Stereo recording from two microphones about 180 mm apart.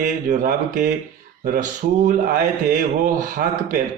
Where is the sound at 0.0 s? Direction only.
45° right (ahead or behind).